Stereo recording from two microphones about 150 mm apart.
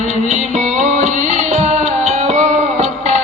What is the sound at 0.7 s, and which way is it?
Music, 55° right (ahead or behind).